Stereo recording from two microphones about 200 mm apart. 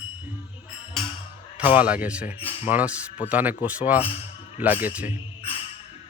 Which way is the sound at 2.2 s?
30° left (ahead or behind).